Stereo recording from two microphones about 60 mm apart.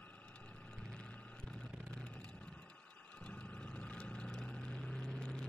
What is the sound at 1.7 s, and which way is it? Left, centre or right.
Vehicle, centre.